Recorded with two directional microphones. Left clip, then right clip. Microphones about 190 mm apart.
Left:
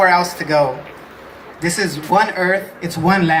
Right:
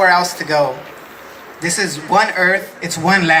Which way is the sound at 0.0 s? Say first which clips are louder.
Right 1 dB; 10° left (ahead or behind).